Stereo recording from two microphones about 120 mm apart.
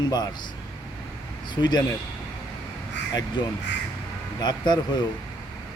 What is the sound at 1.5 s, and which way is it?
Speech, 40° left (ahead or behind).